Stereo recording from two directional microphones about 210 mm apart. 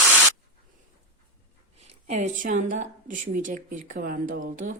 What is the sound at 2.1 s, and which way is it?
Speech, 35° right (ahead or behind).